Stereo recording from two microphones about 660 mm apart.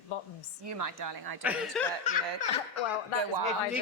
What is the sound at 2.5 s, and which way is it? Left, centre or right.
Speech, left.